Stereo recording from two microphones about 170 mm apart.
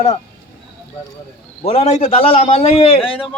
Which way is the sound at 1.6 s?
35° left (ahead or behind).